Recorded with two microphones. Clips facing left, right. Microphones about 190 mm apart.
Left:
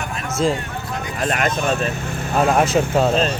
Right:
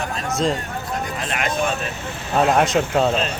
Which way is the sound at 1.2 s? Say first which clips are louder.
Left 9 dB; 50° left (ahead or behind).